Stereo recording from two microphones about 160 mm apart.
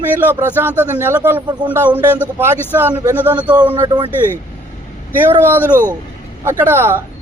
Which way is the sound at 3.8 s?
30° right (ahead or behind).